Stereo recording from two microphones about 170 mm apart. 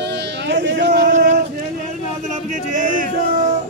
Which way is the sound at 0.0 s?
80° right.